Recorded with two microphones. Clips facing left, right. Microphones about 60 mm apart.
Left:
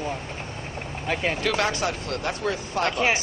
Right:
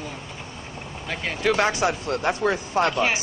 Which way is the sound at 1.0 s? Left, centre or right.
Centre.